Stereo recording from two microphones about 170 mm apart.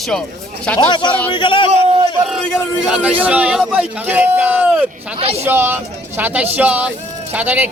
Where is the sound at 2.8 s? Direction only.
10° right (ahead or behind).